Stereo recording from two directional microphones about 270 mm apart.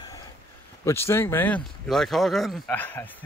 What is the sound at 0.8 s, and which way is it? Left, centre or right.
Speech, centre.